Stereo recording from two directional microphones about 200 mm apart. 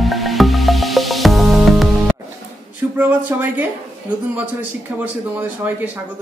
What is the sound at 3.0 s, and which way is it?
Speech, 10° right (ahead or behind).